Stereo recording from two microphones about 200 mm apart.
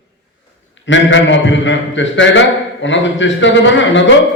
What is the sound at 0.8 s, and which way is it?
A man's voice, 65° left (ahead or behind).